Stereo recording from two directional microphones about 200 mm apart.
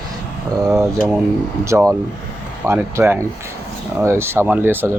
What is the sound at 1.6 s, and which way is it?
Speech, 15° right (ahead or behind).